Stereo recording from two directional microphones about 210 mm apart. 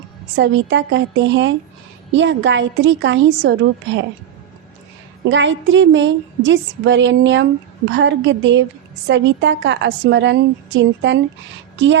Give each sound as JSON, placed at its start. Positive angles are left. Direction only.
{"t": 0.3, "sound": "a woman's voice", "side_deg": -55}
{"t": 5.3, "sound": "a woman's voice", "side_deg": -60}